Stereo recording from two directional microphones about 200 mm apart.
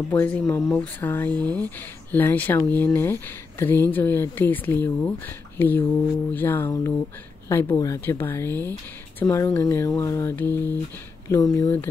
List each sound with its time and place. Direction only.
0.1 s speech: 10° left (ahead or behind)
1.3 s speech: 20° right (ahead or behind)
2.1 s speech: 10° left (ahead or behind)